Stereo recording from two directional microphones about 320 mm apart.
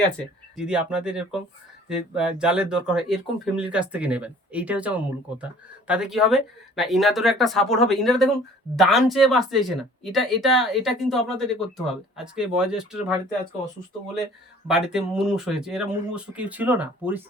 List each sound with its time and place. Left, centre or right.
0.5 s speech: centre
14.7 s speech: centre